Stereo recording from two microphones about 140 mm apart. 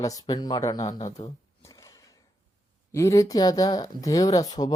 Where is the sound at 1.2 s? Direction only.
50° left (ahead or behind).